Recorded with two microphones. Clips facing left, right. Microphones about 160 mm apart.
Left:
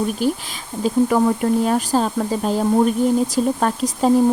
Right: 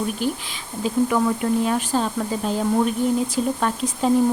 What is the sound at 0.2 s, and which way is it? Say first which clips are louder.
Speech: left 4 dB; 40° left (ahead or behind).